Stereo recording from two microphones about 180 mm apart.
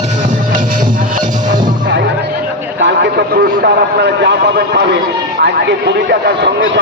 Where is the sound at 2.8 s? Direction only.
75° right (ahead or behind).